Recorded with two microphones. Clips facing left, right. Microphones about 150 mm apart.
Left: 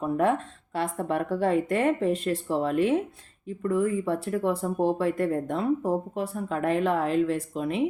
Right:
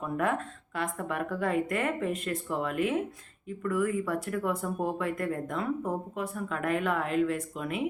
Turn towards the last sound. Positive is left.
turn(degrees=30)  # may be behind; listen again after turning